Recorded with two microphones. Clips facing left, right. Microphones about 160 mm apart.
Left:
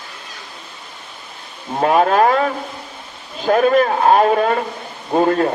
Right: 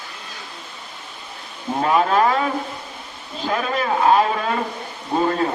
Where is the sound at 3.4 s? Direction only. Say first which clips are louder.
Left 9 dB; 50° left (ahead or behind).